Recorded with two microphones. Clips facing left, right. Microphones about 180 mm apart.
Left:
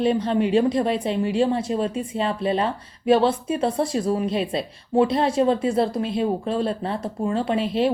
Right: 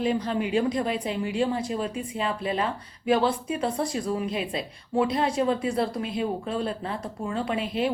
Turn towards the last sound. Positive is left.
turn(degrees=30)  # may be behind; listen again after turning